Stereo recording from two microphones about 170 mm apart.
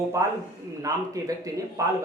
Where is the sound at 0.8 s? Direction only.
20° right (ahead or behind).